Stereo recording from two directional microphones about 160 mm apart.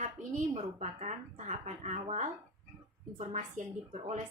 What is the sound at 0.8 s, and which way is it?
Speech, 45° right (ahead or behind).